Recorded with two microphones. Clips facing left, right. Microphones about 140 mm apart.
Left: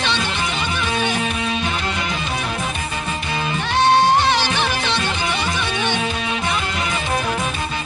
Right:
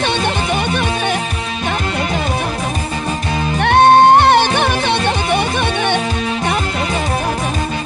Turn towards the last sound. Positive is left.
turn(degrees=-55)  # may be behind; listen again after turning